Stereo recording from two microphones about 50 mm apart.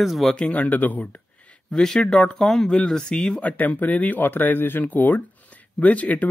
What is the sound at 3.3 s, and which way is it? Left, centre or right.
Speech, left.